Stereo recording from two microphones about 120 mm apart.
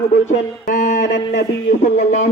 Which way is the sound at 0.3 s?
75° left (ahead or behind).